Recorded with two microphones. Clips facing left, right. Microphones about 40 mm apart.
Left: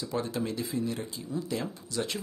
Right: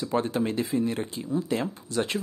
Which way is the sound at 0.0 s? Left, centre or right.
Right.